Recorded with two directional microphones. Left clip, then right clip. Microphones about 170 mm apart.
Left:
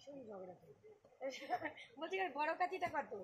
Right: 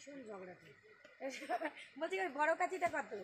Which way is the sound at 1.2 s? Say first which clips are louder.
Right 2 dB; 75° right (ahead or behind).